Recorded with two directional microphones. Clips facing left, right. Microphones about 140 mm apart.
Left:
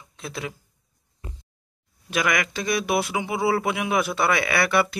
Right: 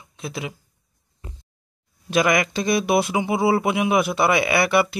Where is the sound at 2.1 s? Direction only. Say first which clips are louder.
Right 5 dB; 25° right (ahead or behind).